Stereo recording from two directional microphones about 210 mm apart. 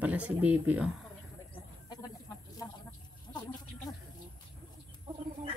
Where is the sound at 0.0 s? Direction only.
5° right (ahead or behind).